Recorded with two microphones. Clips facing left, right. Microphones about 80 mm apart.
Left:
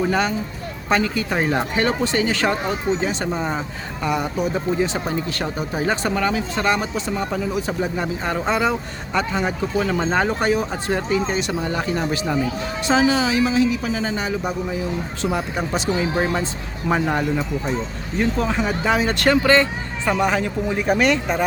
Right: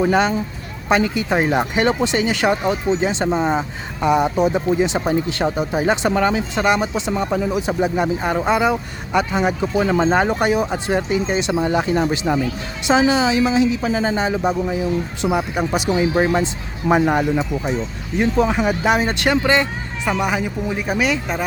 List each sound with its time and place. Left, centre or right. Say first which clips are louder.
0.0 s speech: right 4 dB; right
15.9 s speech: right 4 dB; right
20.1 s speech: left 1 dB; centre